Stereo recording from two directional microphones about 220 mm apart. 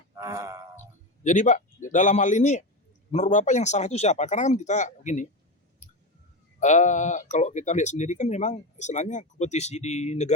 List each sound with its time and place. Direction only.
0.2 s speech: 15° right (ahead or behind)
1.2 s speech: 35° left (ahead or behind)
5.8 s a sound: 35° left (ahead or behind)
6.6 s speech: 35° left (ahead or behind)